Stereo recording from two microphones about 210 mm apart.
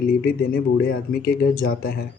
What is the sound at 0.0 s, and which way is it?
Speech, 45° left (ahead or behind).